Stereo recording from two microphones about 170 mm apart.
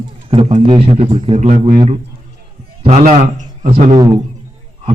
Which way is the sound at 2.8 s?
40° right (ahead or behind).